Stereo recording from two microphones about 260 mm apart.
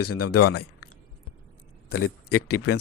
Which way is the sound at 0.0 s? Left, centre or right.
Left.